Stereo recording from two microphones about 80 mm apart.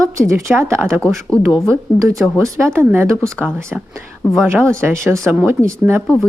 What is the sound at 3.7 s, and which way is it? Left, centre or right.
Speech, centre.